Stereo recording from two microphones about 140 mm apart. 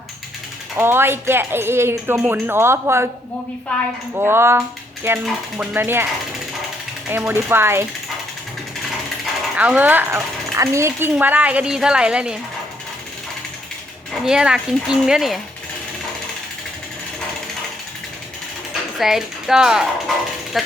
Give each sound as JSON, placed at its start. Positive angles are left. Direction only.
{"t": 0.8, "sound": "speech", "side_deg": -15}
{"t": 4.1, "sound": "speech", "side_deg": -15}
{"t": 7.1, "sound": "speech", "side_deg": -15}
{"t": 9.6, "sound": "speech", "side_deg": -10}
{"t": 14.1, "sound": "speech", "side_deg": -5}
{"t": 18.7, "sound": "speech", "side_deg": 0}